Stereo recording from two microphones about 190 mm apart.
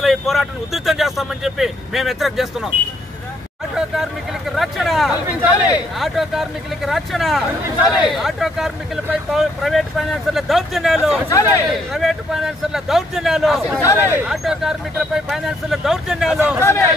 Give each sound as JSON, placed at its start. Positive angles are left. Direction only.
{"t": 0.0, "sound": "speech", "side_deg": 0}
{"t": 3.7, "sound": "a sound", "side_deg": 0}
{"t": 5.7, "sound": "speech", "side_deg": 0}
{"t": 11.2, "sound": "speech", "side_deg": 15}
{"t": 11.9, "sound": "speech", "side_deg": 0}
{"t": 13.7, "sound": "speech", "side_deg": 15}
{"t": 14.1, "sound": "speech", "side_deg": -5}
{"t": 16.6, "sound": "speech", "side_deg": 15}